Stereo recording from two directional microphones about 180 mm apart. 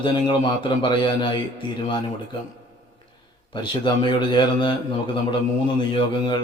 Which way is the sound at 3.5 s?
25° left (ahead or behind).